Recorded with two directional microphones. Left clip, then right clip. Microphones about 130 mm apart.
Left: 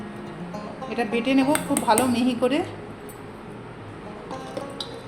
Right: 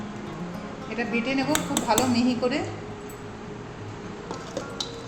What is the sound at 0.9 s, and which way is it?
Speech, 90° left.